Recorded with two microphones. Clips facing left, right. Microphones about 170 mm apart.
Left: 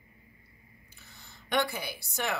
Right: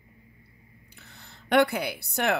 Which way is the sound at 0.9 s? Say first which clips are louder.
Right 5 dB; 65° right (ahead or behind).